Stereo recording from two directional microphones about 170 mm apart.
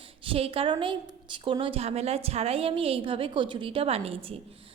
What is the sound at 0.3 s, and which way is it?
A woman's voice, 35° right (ahead or behind).